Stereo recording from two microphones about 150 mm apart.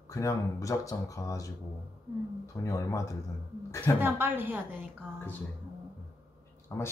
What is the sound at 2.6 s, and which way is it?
Speech, 20° left (ahead or behind).